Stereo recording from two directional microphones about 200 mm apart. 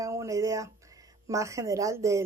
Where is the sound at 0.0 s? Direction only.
15° right (ahead or behind).